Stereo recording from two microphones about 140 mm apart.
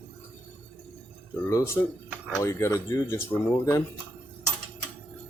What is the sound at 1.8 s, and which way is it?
Speech, 20° left (ahead or behind).